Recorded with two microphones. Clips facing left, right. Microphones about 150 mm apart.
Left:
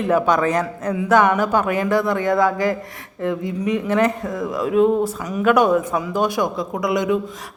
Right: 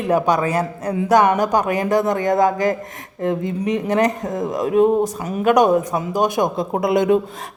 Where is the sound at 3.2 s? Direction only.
35° right (ahead or behind).